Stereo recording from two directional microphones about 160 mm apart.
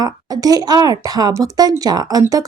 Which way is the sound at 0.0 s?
25° right (ahead or behind).